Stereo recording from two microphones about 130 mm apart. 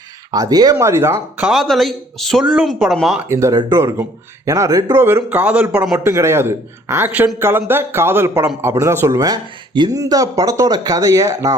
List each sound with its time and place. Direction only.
0.3 s a man's voice: 30° right (ahead or behind)
1.4 s speech: centre (ahead or behind)
3.2 s a man's voice: 20° right (ahead or behind)
6.1 s a man's voice: 20° right (ahead or behind)